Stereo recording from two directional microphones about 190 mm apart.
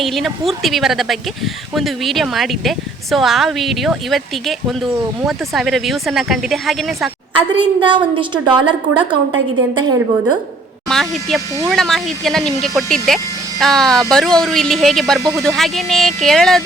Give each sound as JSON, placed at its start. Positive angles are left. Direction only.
{"t": 0.0, "sound": "speech", "side_deg": 0}
{"t": 7.8, "sound": "a woman's voice", "side_deg": -25}
{"t": 10.8, "sound": "speech", "side_deg": 0}
{"t": 11.3, "sound": "speech", "side_deg": -15}
{"t": 11.7, "sound": "speech", "side_deg": 0}